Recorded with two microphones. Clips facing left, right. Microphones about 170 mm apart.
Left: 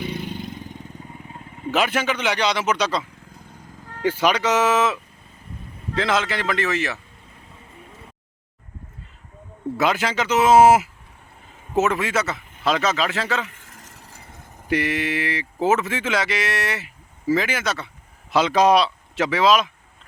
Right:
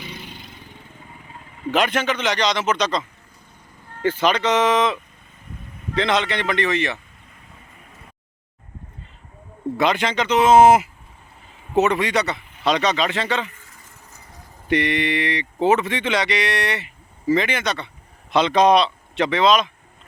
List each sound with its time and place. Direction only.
0.0 s vehicle: 50° left (ahead or behind)
1.7 s a man's voice: 5° left (ahead or behind)
9.7 s speech: 5° left (ahead or behind)
13.5 s a sound: 85° left
14.1 s vehicle: 25° left (ahead or behind)
14.7 s speech: 5° left (ahead or behind)